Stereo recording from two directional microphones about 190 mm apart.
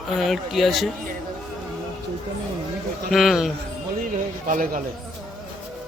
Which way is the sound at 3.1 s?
Centre (ahead or behind).